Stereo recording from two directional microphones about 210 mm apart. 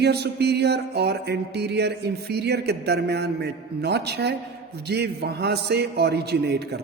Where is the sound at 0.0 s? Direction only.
50° right (ahead or behind).